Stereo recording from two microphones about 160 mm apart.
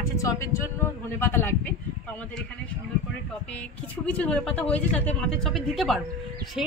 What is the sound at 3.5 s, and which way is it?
A woman's voice, 10° left (ahead or behind).